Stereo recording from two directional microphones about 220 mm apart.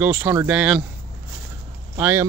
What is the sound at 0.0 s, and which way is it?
Speech, 10° right (ahead or behind).